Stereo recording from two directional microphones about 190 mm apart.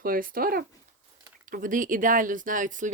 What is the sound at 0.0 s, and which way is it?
Speech, 50° right (ahead or behind).